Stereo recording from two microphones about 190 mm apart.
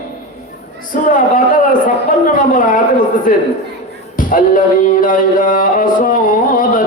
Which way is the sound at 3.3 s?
45° left (ahead or behind).